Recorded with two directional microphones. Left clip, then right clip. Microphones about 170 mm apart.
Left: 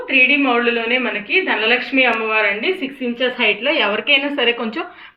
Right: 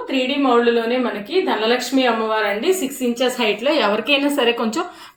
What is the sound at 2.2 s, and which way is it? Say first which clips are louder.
A woman's voice: left 1 dB; 50° right (ahead or behind).